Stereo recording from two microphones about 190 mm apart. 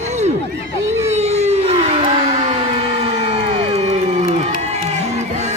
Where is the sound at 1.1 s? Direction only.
35° right (ahead or behind).